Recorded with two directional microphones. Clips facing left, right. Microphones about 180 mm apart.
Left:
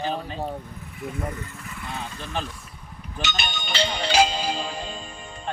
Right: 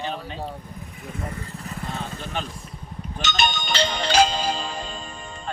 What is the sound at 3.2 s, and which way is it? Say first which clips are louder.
Speech: right 6 dB; 45° right (ahead or behind).